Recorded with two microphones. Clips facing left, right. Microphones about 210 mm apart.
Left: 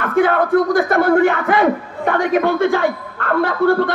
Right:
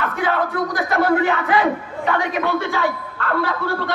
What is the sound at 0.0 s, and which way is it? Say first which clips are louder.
A man's voice: left 6 dB; 50° left (ahead or behind).